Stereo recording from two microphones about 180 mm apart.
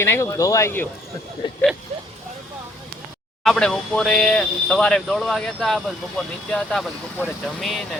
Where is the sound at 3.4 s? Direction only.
5° left (ahead or behind).